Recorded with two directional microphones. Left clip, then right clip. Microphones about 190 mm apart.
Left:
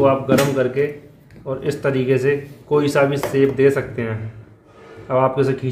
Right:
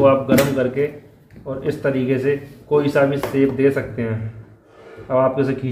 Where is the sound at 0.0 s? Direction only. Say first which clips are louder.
Right 1 dB; 10° left (ahead or behind).